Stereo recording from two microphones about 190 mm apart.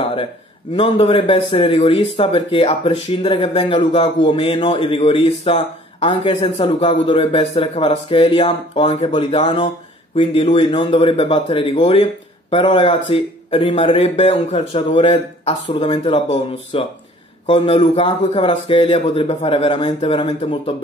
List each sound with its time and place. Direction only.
0.7 s speech: 30° left (ahead or behind)